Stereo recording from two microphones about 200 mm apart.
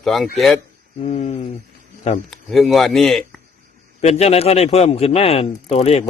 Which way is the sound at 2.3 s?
Centre (ahead or behind).